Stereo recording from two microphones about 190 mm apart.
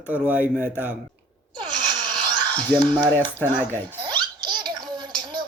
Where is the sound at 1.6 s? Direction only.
20° right (ahead or behind).